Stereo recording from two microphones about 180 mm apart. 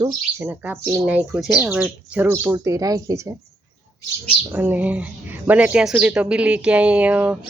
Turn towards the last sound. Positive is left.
turn(degrees=-10)  # may be behind; listen again after turning